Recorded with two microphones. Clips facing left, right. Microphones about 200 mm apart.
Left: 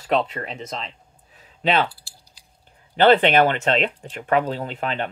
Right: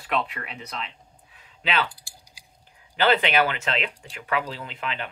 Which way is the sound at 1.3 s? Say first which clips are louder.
Left 6 dB; 40° left (ahead or behind).